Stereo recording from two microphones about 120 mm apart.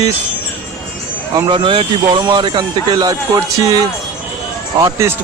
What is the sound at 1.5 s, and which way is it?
A man's voice, 45° right (ahead or behind).